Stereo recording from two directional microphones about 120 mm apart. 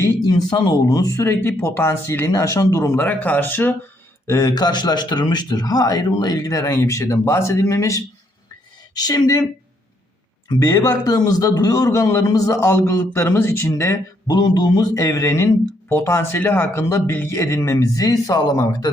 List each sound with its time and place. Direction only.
0.3 s speech: 35° left (ahead or behind); by 3.8 s 15° left (ahead or behind)
4.3 s speech: 30° left (ahead or behind)
10.5 s speech: 30° left (ahead or behind)
14.3 s speech: 35° left (ahead or behind)